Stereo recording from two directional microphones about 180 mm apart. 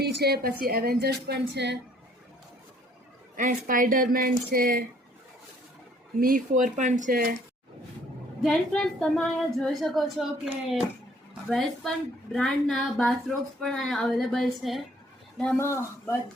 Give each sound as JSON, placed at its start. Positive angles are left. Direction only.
{"t": 0.0, "sound": "a woman's voice", "side_deg": -60}
{"t": 3.3, "sound": "a woman's voice", "side_deg": -45}
{"t": 6.1, "sound": "a woman's voice", "side_deg": -50}
{"t": 8.4, "sound": "speech", "side_deg": 0}
{"t": 15.4, "sound": "speech", "side_deg": 10}